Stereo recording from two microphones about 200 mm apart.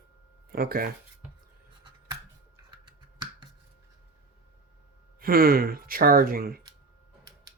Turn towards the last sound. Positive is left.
turn(degrees=-50)  # may be behind; listen again after turning